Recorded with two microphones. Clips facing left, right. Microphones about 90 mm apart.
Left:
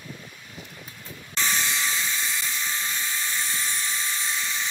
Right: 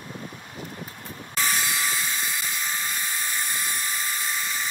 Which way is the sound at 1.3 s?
5° right (ahead or behind).